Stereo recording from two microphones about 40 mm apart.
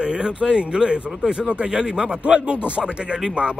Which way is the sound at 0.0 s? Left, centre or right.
Right.